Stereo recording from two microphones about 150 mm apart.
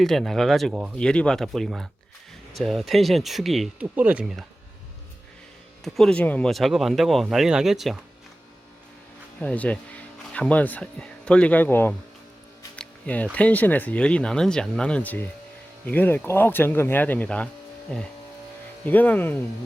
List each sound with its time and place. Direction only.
0.0 s speech: centre (ahead or behind)
0.9 s speech: 5° left (ahead or behind)
5.8 s speech: 5° left (ahead or behind)
9.4 s speech: 10° left (ahead or behind)
12.7 s music: 10° left (ahead or behind)
13.3 s speech: 10° left (ahead or behind)